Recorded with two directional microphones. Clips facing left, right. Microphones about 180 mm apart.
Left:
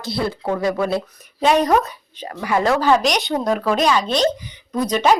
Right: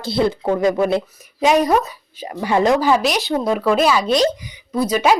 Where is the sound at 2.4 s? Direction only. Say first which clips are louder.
Right 3 dB; 25° right (ahead or behind).